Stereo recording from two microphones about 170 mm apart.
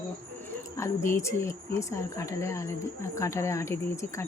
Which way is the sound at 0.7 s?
15° left (ahead or behind).